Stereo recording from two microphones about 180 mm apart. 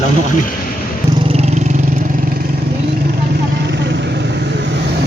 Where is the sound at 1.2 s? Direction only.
35° right (ahead or behind).